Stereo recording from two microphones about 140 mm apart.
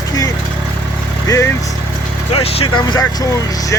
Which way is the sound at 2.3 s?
45° left (ahead or behind).